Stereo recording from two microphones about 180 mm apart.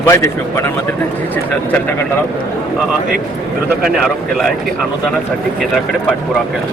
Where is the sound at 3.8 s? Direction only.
Centre (ahead or behind).